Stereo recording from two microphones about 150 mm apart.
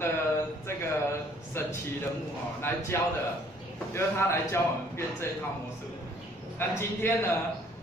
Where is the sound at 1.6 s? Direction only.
15° left (ahead or behind).